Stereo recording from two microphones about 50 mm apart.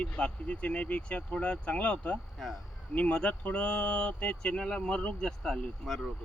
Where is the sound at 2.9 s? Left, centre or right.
Left.